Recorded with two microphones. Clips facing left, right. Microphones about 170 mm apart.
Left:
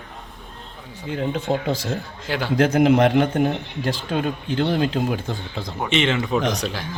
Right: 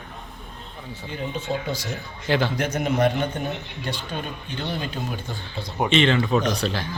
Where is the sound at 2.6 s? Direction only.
90° left.